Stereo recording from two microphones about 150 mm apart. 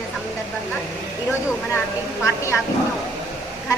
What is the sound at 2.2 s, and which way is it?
Speech, 20° left (ahead or behind).